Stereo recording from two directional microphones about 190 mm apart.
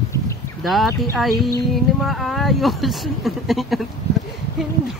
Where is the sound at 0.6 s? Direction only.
Centre (ahead or behind).